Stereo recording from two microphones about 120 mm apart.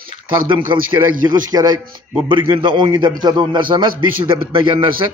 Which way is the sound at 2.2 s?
45° right (ahead or behind).